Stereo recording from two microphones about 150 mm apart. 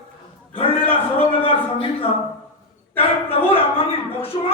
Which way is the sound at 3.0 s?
40° left (ahead or behind).